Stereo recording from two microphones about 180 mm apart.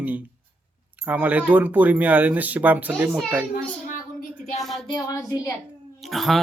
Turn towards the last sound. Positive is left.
turn(degrees=0)  # may be behind; listen again after turning